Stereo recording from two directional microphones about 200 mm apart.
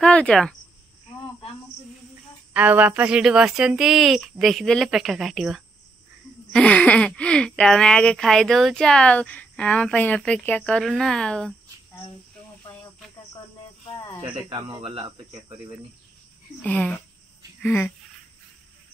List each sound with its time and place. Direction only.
0.0 s speech: 5° left (ahead or behind)
2.5 s speech: 10° right (ahead or behind)
14.5 s speech: 25° right (ahead or behind)
16.6 s speech: 10° left (ahead or behind)